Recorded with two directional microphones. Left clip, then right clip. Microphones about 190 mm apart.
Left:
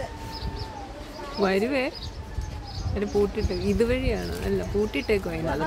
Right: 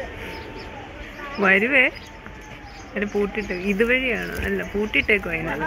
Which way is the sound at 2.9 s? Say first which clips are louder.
Right 1 dB; 15° left (ahead or behind).